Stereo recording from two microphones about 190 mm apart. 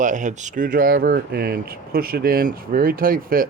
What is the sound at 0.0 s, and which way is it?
Speech, 40° right (ahead or behind).